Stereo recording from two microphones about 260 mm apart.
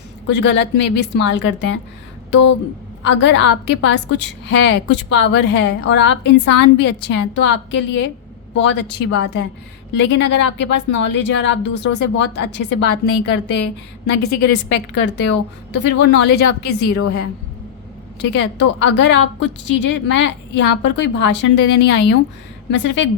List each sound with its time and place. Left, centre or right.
0.3 s a woman's voice: left
3.0 s a woman's voice: left
16.9 s a woman's voice: left
18.2 s a woman's voice: left